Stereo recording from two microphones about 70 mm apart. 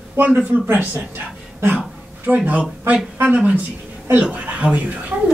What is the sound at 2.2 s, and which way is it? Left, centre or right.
A man's voice, right.